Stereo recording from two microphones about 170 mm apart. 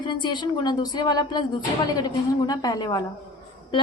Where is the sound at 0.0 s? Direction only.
25° left (ahead or behind).